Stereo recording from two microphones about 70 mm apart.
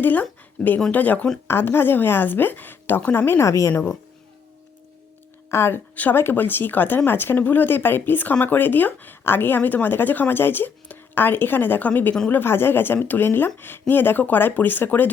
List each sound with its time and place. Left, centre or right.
0.0 s speech: left
1.5 s speech: left
5.5 s speech: left